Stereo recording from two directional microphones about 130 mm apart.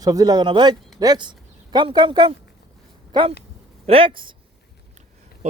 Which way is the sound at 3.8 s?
45° right (ahead or behind).